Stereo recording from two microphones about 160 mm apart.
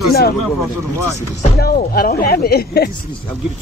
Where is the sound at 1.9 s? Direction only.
70° left (ahead or behind).